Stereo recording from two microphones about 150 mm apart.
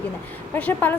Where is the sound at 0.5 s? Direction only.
10° left (ahead or behind).